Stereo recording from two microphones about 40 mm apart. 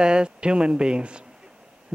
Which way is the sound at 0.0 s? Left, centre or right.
Right.